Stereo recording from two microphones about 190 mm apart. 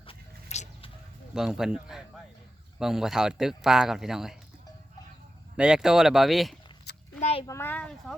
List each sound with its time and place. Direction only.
0.0 s music: 30° left (ahead or behind)
1.4 s speech: 5° right (ahead or behind)
5.5 s speech: 5° right (ahead or behind)
7.2 s a child's voice: 35° left (ahead or behind)
7.4 s a child's voice: 15° left (ahead or behind)